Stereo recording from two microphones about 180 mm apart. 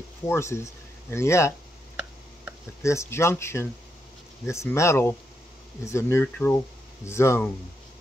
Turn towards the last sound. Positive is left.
turn(degrees=15)  # may be behind; listen again after turning